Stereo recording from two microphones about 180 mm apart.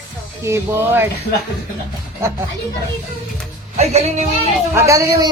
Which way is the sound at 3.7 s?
35° right (ahead or behind).